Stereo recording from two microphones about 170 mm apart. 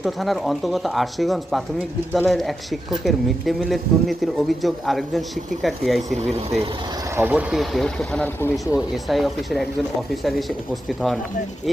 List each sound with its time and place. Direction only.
0.0 s speech: centre (ahead or behind)
6.3 s speech: 35° right (ahead or behind)
7.2 s speech: 10° right (ahead or behind)
10.8 s speech: centre (ahead or behind)